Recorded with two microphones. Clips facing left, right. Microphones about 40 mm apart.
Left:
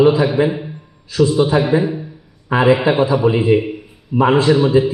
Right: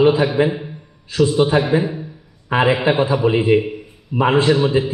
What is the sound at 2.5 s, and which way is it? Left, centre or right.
A man's voice, centre.